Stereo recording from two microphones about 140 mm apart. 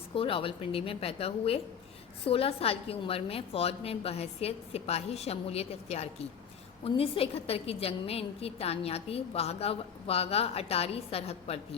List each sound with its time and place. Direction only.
0.1 s a woman's voice: 40° left (ahead or behind)